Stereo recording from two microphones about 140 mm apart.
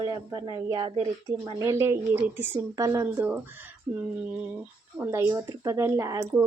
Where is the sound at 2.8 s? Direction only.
25° right (ahead or behind).